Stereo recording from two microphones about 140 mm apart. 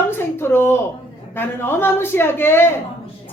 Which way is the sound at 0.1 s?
15° left (ahead or behind).